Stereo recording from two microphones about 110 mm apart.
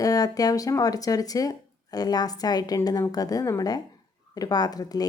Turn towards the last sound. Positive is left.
turn(degrees=35)  # may be behind; listen again after turning